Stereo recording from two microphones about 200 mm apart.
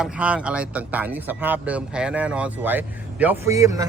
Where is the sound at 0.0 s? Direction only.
5° right (ahead or behind).